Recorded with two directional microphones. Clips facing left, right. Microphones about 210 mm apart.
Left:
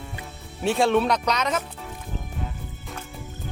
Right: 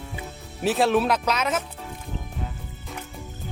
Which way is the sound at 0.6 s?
Centre (ahead or behind).